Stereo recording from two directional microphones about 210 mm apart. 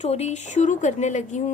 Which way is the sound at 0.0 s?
30° left (ahead or behind).